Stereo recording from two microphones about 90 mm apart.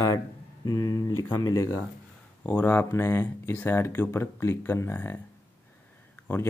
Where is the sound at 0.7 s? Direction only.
40° left (ahead or behind).